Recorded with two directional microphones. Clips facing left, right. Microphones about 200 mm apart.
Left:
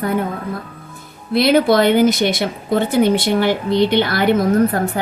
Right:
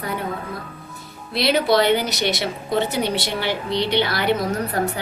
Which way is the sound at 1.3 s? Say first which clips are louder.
Left 5 dB; 50° left (ahead or behind).